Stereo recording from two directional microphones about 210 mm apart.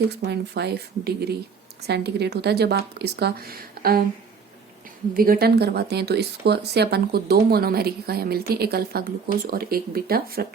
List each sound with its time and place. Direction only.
0.3 s speech: 50° right (ahead or behind)
5.1 s speech: 45° right (ahead or behind)